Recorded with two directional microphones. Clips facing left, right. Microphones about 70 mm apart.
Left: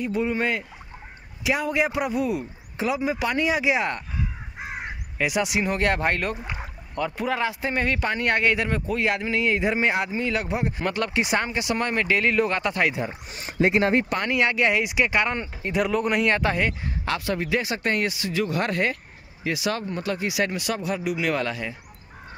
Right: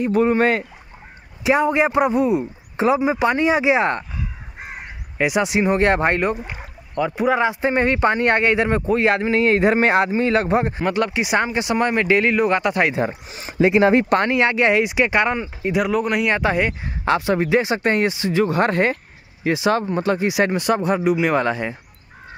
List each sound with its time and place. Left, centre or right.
0.0 s speech: right
1.4 s speech: right
5.1 s speech: right
10.8 s speech: centre
14.2 s speech: right
15.3 s speech: centre
16.3 s speech: centre
17.0 s speech: right